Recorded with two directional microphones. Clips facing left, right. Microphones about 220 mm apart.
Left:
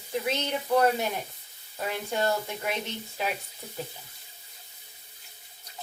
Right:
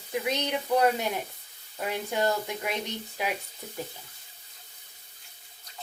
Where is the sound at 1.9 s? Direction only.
15° right (ahead or behind).